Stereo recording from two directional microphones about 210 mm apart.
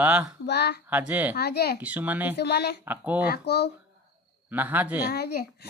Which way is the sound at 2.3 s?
50° left (ahead or behind).